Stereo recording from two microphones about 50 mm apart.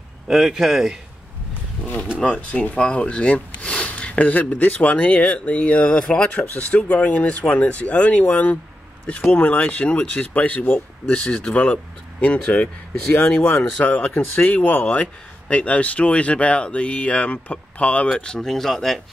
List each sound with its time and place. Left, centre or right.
0.3 s speech: centre
1.5 s wild animals: left
2.1 s speech: left
18.1 s speech: centre